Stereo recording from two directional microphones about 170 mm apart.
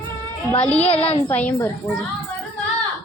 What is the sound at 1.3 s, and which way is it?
Speech, 10° left (ahead or behind).